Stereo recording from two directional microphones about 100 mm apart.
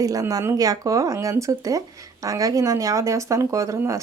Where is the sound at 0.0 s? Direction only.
35° right (ahead or behind).